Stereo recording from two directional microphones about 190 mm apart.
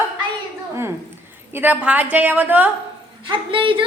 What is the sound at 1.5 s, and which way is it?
A woman's voice, 10° right (ahead or behind).